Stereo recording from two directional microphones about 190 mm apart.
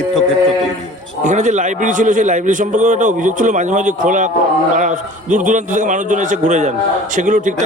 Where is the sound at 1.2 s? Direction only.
40° right (ahead or behind).